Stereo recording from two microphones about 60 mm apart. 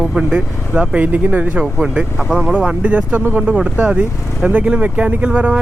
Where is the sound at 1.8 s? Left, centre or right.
Centre.